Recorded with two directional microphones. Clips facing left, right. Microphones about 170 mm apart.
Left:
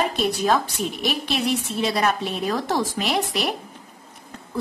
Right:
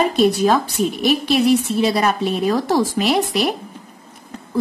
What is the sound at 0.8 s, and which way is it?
Speech, 40° right (ahead or behind).